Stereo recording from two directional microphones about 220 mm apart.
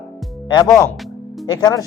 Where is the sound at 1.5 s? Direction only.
20° left (ahead or behind).